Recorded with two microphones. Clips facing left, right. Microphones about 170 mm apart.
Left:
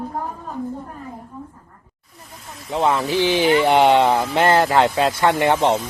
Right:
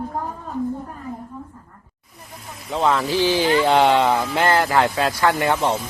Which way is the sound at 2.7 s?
20° left (ahead or behind).